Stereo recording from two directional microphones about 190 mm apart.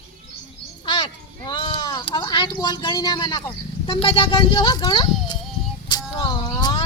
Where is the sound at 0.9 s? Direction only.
25° left (ahead or behind).